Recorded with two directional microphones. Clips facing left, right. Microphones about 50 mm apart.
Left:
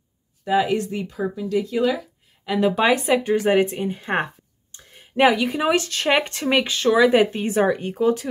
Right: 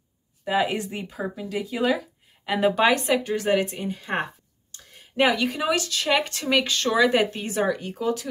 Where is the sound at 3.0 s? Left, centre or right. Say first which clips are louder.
Left 4 dB; centre.